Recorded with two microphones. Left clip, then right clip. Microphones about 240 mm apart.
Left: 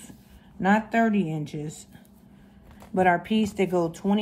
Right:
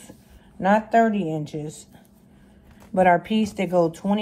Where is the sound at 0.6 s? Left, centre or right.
Centre.